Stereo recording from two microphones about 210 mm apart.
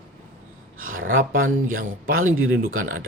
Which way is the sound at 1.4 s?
75° right (ahead or behind).